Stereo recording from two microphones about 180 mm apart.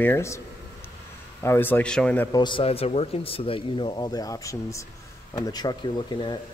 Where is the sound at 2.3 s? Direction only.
25° left (ahead or behind).